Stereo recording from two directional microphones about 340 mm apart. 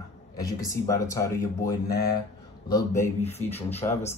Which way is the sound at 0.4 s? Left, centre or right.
Centre.